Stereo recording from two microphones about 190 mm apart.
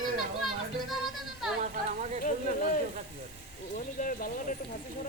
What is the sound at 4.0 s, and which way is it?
Speech, 45° left (ahead or behind).